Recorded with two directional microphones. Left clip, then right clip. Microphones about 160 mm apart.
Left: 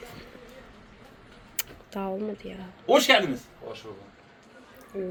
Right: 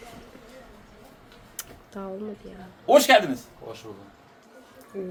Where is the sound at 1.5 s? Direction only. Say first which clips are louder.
Left 4 dB; 20° left (ahead or behind).